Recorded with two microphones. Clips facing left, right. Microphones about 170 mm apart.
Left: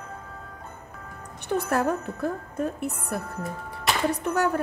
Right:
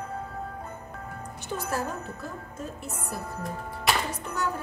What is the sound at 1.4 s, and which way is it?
A woman's voice, 60° left (ahead or behind).